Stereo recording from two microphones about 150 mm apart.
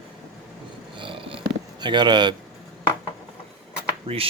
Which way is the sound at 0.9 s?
35° right (ahead or behind).